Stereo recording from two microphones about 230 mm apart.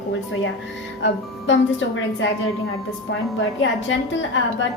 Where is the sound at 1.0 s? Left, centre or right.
Left.